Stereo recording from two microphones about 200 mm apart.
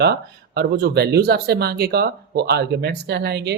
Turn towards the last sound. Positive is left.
turn(degrees=-55)  # may be behind; listen again after turning